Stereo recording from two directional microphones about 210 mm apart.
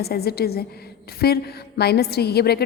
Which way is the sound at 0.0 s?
50° left (ahead or behind).